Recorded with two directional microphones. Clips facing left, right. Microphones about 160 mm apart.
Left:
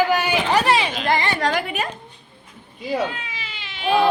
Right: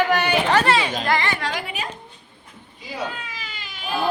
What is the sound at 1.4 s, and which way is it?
Speech, 45° left (ahead or behind).